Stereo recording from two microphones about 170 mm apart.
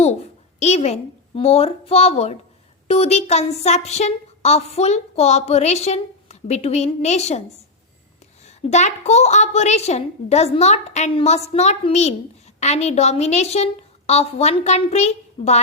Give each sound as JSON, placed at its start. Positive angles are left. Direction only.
{"t": 0.6, "sound": "speech", "side_deg": 40}